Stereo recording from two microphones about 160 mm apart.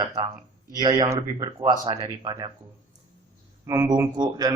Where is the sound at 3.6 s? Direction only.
15° right (ahead or behind).